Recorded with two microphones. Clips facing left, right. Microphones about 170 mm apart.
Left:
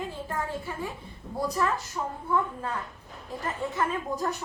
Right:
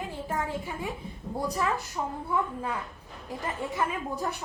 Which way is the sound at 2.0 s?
10° right (ahead or behind).